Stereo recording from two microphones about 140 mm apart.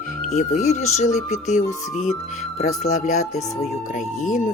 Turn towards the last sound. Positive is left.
turn(degrees=65)  # may be behind; listen again after turning